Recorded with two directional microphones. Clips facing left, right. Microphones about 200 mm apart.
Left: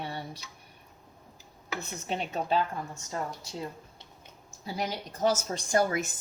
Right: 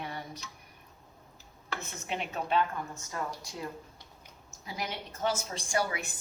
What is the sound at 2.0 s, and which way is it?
A woman's voice, 35° left (ahead or behind).